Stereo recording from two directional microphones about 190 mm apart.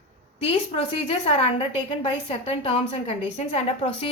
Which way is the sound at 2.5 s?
30° left (ahead or behind).